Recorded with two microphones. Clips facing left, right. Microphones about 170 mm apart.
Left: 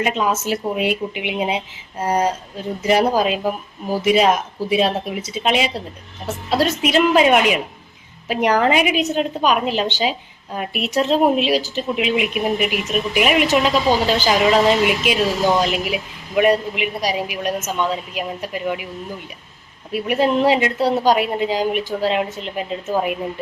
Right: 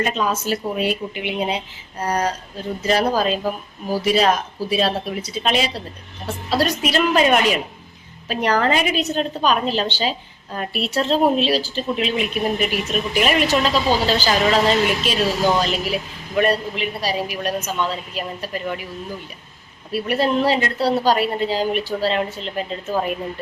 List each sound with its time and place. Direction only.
0.0 s a woman's voice: 10° left (ahead or behind)
2.0 s a woman's voice: 25° left (ahead or behind)
10.7 s speech: 30° right (ahead or behind)
10.9 s a woman's voice: 15° left (ahead or behind)
19.9 s a woman's voice: 15° left (ahead or behind)